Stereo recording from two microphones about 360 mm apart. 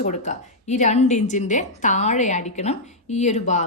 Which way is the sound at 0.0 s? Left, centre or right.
Centre.